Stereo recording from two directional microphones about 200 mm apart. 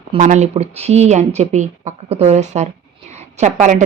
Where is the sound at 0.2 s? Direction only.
35° right (ahead or behind).